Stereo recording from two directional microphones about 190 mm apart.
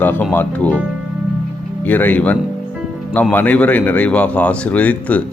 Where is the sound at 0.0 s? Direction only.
10° left (ahead or behind).